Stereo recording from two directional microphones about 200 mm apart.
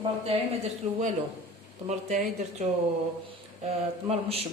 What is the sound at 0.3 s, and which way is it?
A man's voice, 30° right (ahead or behind).